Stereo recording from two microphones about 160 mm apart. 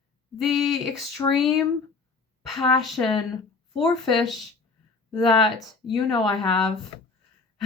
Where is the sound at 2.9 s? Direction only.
25° left (ahead or behind).